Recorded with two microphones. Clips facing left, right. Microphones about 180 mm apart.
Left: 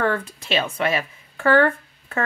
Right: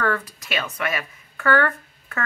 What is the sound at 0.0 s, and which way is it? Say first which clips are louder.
A woman's voice: left 2 dB; 25° left (ahead or behind).